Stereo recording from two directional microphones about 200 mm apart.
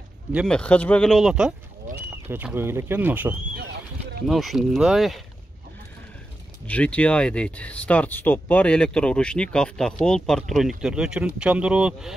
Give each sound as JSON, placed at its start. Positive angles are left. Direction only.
{"t": 0.3, "sound": "speech", "side_deg": 0}
{"t": 1.9, "sound": "speech", "side_deg": -40}
{"t": 2.2, "sound": "speech", "side_deg": -10}
{"t": 6.7, "sound": "speech", "side_deg": 5}